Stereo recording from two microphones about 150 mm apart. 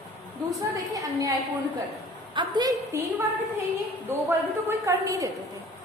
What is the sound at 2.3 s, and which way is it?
Speech, 30° right (ahead or behind).